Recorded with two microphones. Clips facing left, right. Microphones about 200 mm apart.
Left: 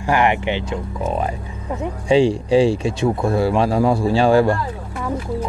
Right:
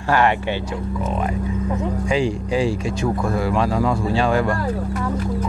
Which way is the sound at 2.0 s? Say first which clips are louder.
Left 8 dB; 30° left (ahead or behind).